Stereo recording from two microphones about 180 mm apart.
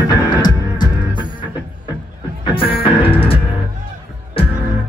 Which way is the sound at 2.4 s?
30° left (ahead or behind).